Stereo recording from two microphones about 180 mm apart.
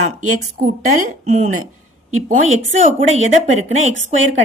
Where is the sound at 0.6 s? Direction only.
40° right (ahead or behind).